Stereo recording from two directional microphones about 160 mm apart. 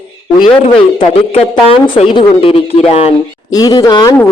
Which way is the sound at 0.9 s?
40° left (ahead or behind).